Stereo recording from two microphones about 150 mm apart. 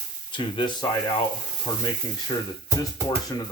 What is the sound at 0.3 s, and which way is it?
Speech, 35° left (ahead or behind).